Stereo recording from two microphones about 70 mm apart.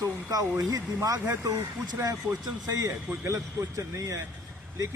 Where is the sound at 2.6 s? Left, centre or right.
Right.